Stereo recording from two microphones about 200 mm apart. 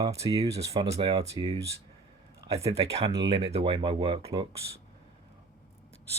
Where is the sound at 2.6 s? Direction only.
30° right (ahead or behind).